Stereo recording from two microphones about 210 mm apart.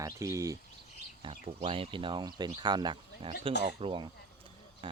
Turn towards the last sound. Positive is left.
turn(degrees=-25)  # may be behind; listen again after turning